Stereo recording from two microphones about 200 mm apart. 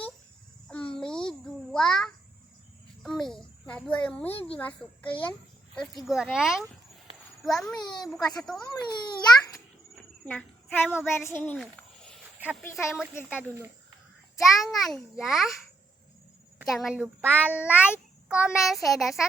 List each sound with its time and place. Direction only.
0.9 s babbling: 5° left (ahead or behind)
3.0 s a child's voice: centre (ahead or behind)
4.3 s a child's voice: 30° left (ahead or behind)
4.5 s a child's voice: 5° left (ahead or behind)
7.8 s a child's voice: 20° left (ahead or behind)
9.9 s a child's voice: 5° left (ahead or behind)
11.6 s a sound: centre (ahead or behind)
12.7 s a woman's voice: 5° right (ahead or behind)
16.6 s a woman's voice: centre (ahead or behind)